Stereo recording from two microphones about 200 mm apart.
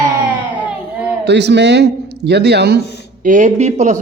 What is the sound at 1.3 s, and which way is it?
A man's voice, 60° right (ahead or behind).